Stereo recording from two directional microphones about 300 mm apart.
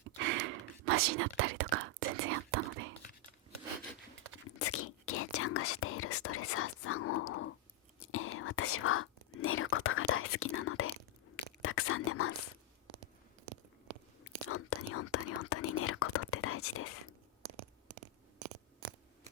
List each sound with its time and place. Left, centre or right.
0.3 s whispering: right
4.4 s a sound: left
5.0 s whispering: left
11.3 s a sound: left
11.6 s whispering: left
14.3 s whispering: left